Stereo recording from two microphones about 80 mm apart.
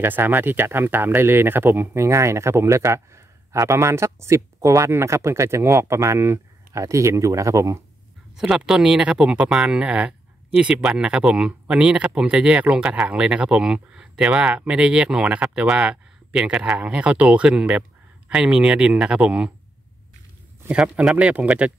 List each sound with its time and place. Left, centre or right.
0.0 s speech: right
8.4 s speech: centre
20.7 s speech: centre